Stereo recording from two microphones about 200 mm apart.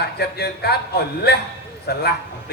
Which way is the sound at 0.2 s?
55° left (ahead or behind).